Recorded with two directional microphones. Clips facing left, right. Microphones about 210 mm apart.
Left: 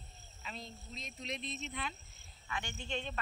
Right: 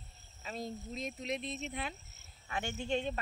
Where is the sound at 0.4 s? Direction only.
40° right (ahead or behind).